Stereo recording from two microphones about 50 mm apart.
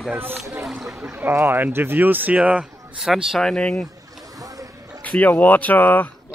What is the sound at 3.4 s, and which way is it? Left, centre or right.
Speech, centre.